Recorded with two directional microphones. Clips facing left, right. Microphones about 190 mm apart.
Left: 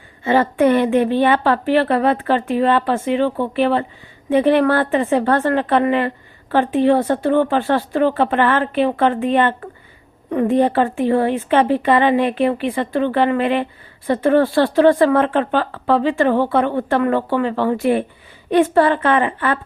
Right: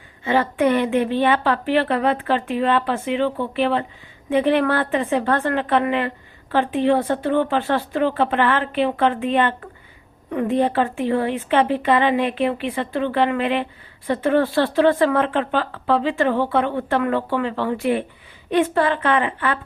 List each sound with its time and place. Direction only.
0.3 s a woman's voice: 45° left (ahead or behind)